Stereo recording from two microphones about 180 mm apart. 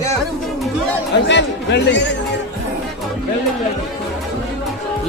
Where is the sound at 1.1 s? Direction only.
75° left (ahead or behind).